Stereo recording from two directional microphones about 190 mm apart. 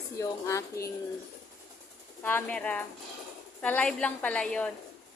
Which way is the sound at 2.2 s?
10° left (ahead or behind).